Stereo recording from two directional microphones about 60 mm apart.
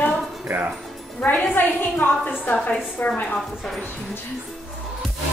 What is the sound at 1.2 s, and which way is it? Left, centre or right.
A woman's voice, left.